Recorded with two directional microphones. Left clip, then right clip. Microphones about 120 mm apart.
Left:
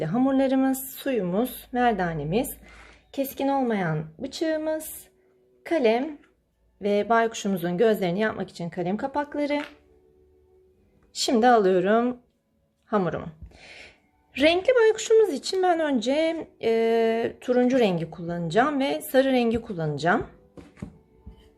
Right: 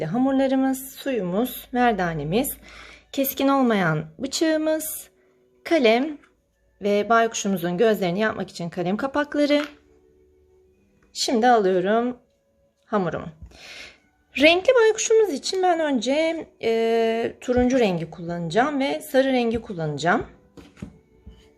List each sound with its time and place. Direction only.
0.0 s speech: centre (ahead or behind); by 6.1 s 35° right (ahead or behind)
6.7 s speech: 20° right (ahead or behind); by 9.6 s 40° right (ahead or behind)
11.1 s speech: 10° left (ahead or behind)
13.5 s a sound: 20° right (ahead or behind)
14.3 s speech: 15° right (ahead or behind)